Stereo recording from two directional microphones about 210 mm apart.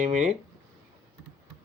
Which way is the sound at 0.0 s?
35° right (ahead or behind).